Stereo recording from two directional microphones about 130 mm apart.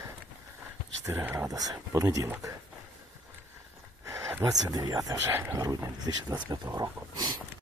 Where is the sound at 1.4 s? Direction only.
30° right (ahead or behind).